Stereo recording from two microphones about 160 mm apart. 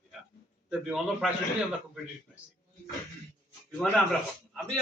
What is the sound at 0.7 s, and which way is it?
Speech, 5° right (ahead or behind).